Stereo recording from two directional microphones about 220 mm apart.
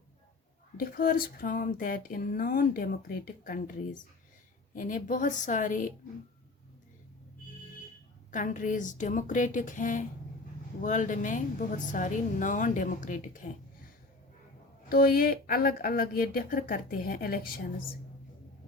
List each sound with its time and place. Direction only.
0.8 s speech: 40° left (ahead or behind)
8.3 s speech: 35° left (ahead or behind)
14.8 s speech: 45° left (ahead or behind)